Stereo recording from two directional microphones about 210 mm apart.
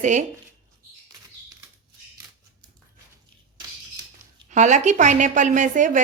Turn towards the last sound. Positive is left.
turn(degrees=-35)  # may be behind; listen again after turning